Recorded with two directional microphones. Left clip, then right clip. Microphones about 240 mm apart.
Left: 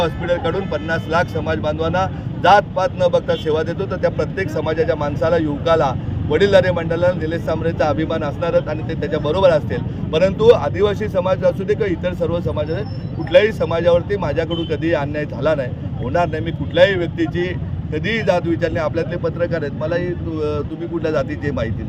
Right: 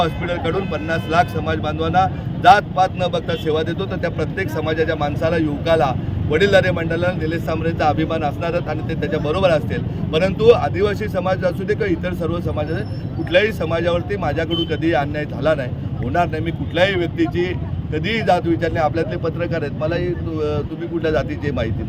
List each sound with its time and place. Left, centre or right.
0.0 s speech: centre